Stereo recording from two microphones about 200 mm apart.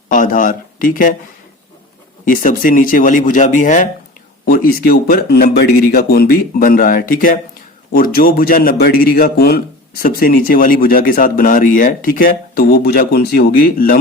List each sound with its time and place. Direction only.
0.1 s speech: 40° left (ahead or behind)
2.2 s speech: 40° left (ahead or behind)